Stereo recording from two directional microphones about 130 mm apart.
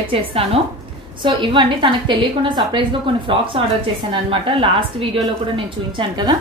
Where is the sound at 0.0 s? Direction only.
45° right (ahead or behind).